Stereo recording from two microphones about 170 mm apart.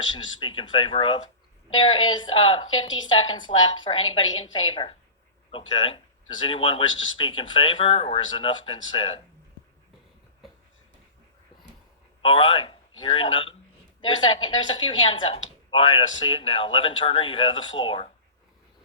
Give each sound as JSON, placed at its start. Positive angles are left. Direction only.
{"t": 0.3, "sound": "speech", "side_deg": 30}
{"t": 12.2, "sound": "a man's voice", "side_deg": 30}